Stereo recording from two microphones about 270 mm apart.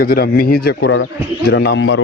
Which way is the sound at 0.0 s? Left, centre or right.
Left.